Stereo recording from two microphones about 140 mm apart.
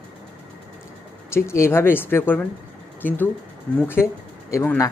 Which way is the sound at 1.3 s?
20° left (ahead or behind).